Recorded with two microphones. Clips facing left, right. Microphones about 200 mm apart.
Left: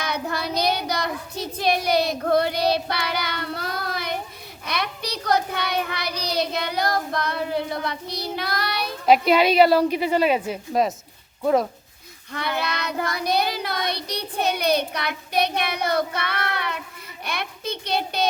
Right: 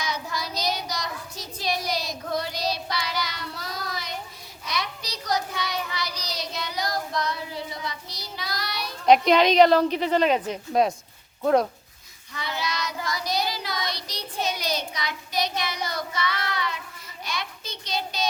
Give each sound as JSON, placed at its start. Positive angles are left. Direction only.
{"t": 0.0, "sound": "child singing", "side_deg": 60}
{"t": 9.0, "sound": "a woman's voice", "side_deg": 5}
{"t": 12.3, "sound": "child singing", "side_deg": 60}
{"t": 17.2, "sound": "a child's voice", "side_deg": 60}